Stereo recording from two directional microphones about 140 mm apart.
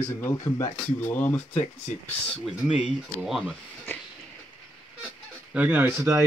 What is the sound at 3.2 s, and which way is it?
Speech, centre (ahead or behind).